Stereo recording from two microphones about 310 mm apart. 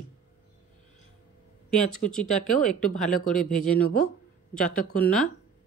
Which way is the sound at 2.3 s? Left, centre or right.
Left.